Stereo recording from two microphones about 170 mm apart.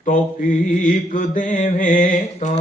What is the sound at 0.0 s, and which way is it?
Mantra, 50° left (ahead or behind).